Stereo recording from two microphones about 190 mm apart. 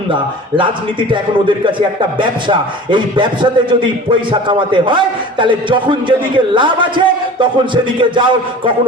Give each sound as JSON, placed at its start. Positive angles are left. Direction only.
{"t": 0.1, "sound": "speech", "side_deg": -25}